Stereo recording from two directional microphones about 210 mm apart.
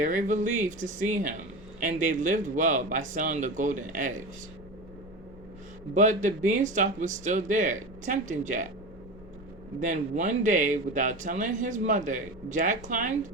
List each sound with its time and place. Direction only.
0.0 s a man's voice: 40° right (ahead or behind)
5.9 s a man's voice: 35° right (ahead or behind)
9.8 s a man's voice: 35° right (ahead or behind)